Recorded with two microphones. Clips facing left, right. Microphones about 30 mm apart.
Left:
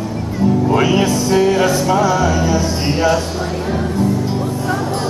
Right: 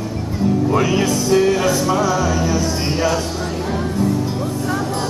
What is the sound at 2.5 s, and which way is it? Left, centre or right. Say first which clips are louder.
Speech: left 2 dB; centre.